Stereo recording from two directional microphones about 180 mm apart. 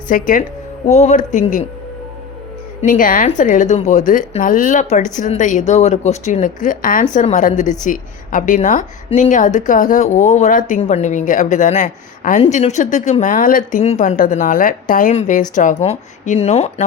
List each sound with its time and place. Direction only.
0.1 s a woman's voice: 50° left (ahead or behind)
2.8 s a woman's voice: 50° left (ahead or behind)